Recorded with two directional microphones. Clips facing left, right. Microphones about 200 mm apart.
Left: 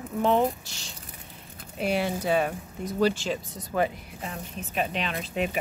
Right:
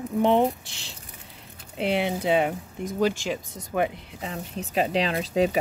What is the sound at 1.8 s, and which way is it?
Speech, 20° right (ahead or behind).